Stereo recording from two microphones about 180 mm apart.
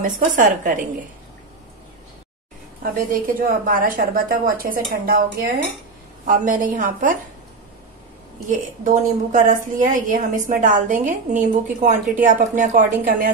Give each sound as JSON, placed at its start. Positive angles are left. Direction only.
{"t": 0.0, "sound": "a woman's voice", "side_deg": -45}
{"t": 3.1, "sound": "a woman's voice", "side_deg": -50}
{"t": 6.2, "sound": "a woman's voice", "side_deg": -50}
{"t": 8.5, "sound": "a woman's voice", "side_deg": -45}